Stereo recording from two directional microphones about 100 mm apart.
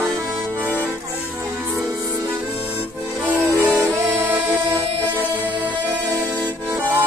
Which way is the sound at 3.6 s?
15° right (ahead or behind).